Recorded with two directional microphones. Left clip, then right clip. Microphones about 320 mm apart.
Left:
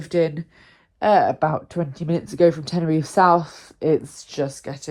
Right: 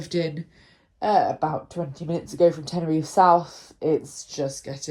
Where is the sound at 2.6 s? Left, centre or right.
Left.